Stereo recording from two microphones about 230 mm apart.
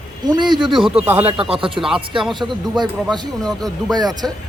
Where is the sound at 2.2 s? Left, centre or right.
Centre.